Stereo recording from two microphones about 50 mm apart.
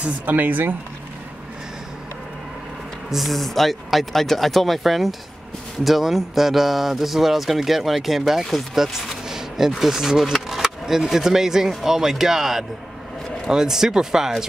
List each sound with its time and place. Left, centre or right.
0.0 s speech: right
3.1 s speech: centre